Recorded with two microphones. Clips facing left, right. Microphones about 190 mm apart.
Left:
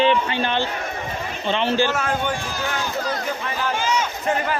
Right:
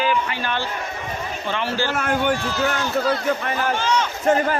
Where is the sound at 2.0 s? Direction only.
55° right (ahead or behind).